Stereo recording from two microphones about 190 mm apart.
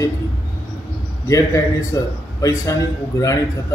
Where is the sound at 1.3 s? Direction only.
15° left (ahead or behind).